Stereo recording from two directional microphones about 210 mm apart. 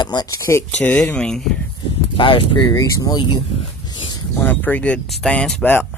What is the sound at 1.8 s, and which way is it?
Speech, 25° left (ahead or behind).